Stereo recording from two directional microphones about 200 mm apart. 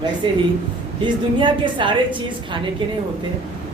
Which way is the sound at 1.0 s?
25° right (ahead or behind).